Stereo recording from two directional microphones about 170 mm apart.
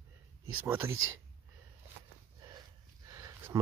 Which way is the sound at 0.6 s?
15° right (ahead or behind).